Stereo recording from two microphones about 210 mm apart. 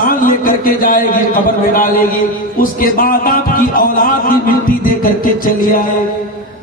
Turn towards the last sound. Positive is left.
turn(degrees=40)  # may be behind; listen again after turning